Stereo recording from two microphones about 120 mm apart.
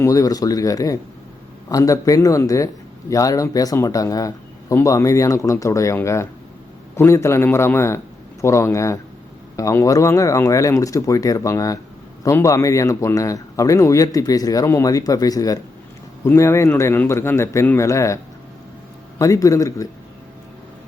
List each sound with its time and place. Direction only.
0.0 s a man's voice: 30° left (ahead or behind)
19.2 s a man's voice: 25° left (ahead or behind)